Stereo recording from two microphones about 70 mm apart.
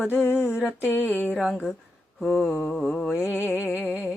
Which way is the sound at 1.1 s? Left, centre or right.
Left.